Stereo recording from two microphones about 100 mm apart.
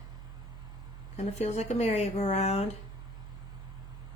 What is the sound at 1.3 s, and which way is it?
Speech, 90° left.